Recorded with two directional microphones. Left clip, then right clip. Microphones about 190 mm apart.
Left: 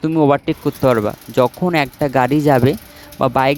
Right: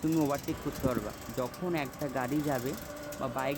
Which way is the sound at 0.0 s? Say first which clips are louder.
Left 16 dB; 55° left (ahead or behind).